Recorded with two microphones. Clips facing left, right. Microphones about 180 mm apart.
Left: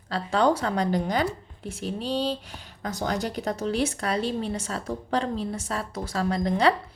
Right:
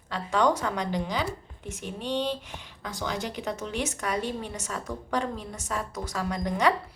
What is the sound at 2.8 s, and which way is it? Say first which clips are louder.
A woman's voice: left 4 dB; 45° left (ahead or behind).